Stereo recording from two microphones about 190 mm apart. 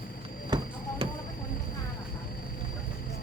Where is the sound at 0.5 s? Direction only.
20° right (ahead or behind).